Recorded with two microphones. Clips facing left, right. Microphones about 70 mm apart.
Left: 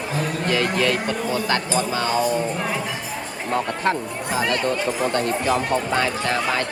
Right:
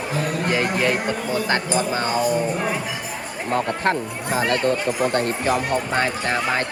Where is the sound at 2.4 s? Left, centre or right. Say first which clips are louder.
Right 2 dB; centre.